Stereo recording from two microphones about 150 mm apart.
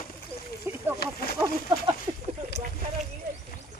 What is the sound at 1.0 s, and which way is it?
Speech, 90° left.